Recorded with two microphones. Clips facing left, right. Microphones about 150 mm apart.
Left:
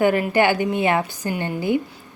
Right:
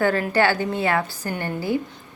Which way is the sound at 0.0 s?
15° left (ahead or behind).